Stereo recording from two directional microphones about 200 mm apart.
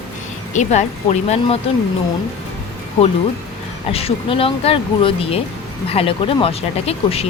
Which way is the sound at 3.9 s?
30° left (ahead or behind).